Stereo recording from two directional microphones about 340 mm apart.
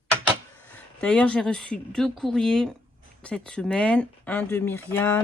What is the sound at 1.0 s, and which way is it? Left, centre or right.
Speech, centre.